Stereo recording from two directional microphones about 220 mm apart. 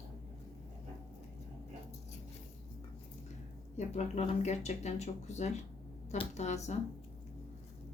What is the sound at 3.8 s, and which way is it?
Speech, 30° left (ahead or behind).